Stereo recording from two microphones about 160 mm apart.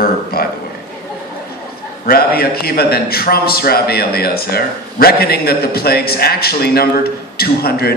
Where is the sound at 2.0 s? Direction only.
70° left (ahead or behind).